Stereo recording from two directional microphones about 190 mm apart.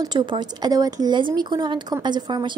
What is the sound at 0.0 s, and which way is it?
A woman's voice, 20° right (ahead or behind).